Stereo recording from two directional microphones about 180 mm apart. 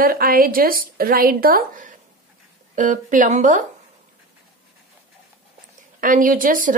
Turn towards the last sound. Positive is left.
turn(degrees=-50)  # may be behind; listen again after turning